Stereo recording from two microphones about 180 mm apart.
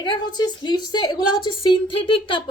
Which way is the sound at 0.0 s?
25° left (ahead or behind).